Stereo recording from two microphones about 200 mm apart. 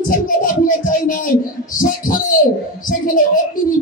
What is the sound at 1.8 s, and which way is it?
Speech, 40° left (ahead or behind).